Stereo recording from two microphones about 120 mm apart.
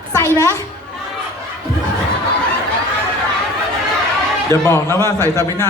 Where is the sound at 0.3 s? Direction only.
25° right (ahead or behind).